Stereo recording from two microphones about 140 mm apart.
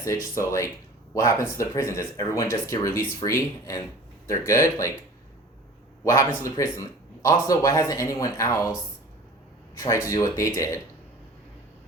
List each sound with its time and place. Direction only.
0.0 s speech: 20° left (ahead or behind)
6.1 s speech: 20° left (ahead or behind)
9.7 s speech: 25° left (ahead or behind)